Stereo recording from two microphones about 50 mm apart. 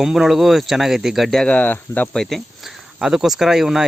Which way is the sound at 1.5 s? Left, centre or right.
Left.